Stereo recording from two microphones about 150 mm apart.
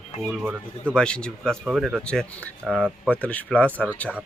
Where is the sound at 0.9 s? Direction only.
5° left (ahead or behind).